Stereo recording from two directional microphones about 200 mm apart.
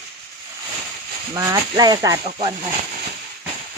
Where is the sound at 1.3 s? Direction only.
20° right (ahead or behind).